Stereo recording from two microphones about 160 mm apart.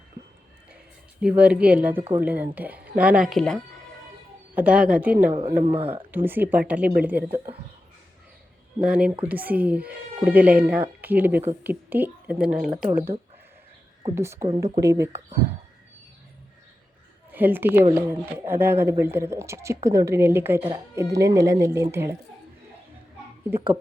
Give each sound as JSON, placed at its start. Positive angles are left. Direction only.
{"t": 1.2, "sound": "speech", "side_deg": -10}
{"t": 4.5, "sound": "speech", "side_deg": -10}
{"t": 8.8, "sound": "speech", "side_deg": -5}
{"t": 14.2, "sound": "speech", "side_deg": -15}
{"t": 17.3, "sound": "speech", "side_deg": -10}
{"t": 23.5, "sound": "speech", "side_deg": -15}